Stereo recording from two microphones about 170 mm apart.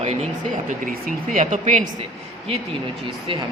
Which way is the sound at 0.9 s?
55° right (ahead or behind).